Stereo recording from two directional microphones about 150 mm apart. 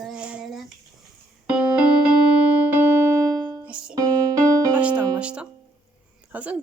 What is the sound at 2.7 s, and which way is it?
Music, 15° right (ahead or behind).